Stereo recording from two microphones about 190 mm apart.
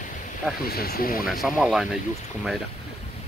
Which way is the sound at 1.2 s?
Centre (ahead or behind).